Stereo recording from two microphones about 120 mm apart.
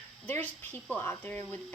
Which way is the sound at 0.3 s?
15° left (ahead or behind).